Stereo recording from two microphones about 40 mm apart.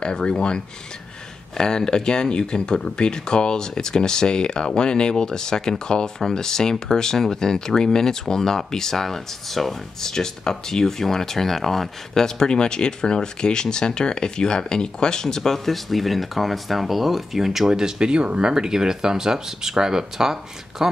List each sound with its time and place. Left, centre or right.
0.0 s speech: left
1.6 s speech: centre